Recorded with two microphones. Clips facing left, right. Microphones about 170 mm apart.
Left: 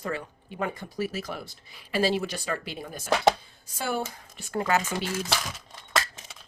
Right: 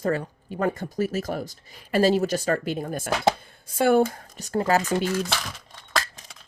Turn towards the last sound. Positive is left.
turn(degrees=0)  # may be behind; listen again after turning